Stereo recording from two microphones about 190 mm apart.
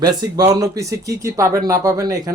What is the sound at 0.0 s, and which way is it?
Speech, 20° right (ahead or behind).